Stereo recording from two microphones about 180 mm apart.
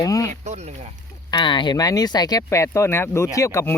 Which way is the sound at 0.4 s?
40° right (ahead or behind).